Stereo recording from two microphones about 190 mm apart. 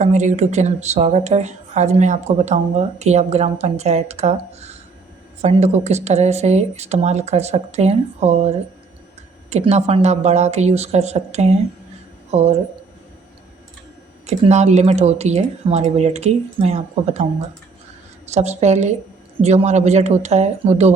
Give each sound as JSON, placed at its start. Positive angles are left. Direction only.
{"t": 0.0, "sound": "a woman's voice", "side_deg": -40}
{"t": 14.3, "sound": "a woman's voice", "side_deg": -35}
{"t": 18.3, "sound": "a woman's voice", "side_deg": -35}